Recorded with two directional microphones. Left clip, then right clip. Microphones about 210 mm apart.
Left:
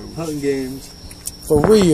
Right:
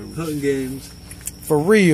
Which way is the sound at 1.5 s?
10° right (ahead or behind).